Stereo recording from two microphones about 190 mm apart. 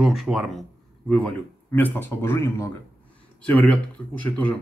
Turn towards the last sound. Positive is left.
turn(degrees=5)  # may be behind; listen again after turning